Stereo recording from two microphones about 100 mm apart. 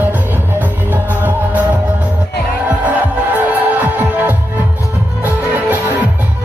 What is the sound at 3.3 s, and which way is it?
Music, 20° right (ahead or behind).